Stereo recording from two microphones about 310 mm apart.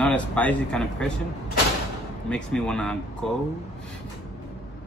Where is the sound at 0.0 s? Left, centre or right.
Centre.